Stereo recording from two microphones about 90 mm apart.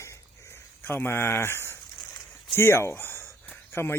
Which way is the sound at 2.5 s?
25° left (ahead or behind).